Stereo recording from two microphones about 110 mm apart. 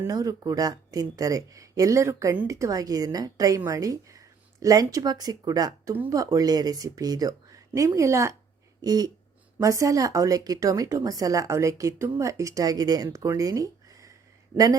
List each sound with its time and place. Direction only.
0.1 s speech: 35° right (ahead or behind)